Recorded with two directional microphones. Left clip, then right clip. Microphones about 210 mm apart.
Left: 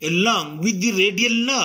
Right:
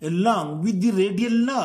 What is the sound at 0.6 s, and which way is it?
Speech, 90° right.